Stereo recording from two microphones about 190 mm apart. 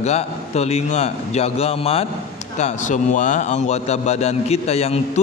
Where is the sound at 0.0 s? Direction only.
35° left (ahead or behind).